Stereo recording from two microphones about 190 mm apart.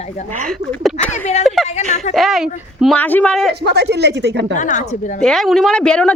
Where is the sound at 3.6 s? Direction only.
60° right (ahead or behind).